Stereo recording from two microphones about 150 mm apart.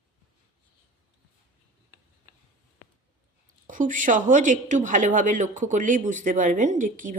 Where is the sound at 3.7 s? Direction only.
60° right (ahead or behind).